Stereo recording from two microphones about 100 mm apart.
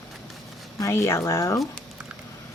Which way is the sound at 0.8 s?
25° left (ahead or behind).